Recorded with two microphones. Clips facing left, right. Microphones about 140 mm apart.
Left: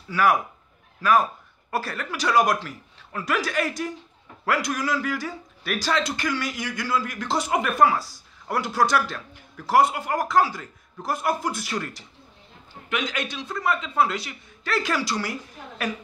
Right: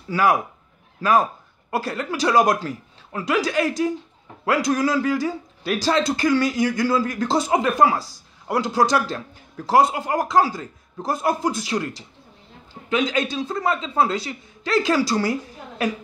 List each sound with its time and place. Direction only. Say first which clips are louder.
0.1 s a man's voice: right 2 dB; 25° right (ahead or behind)
1.9 s a man's voice: right 8 dB; 25° right (ahead or behind)
12.9 s a man's voice: right 7 dB; 30° right (ahead or behind)